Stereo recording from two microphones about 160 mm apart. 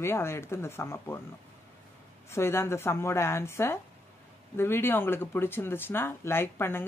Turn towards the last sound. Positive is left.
turn(degrees=15)  # may be behind; listen again after turning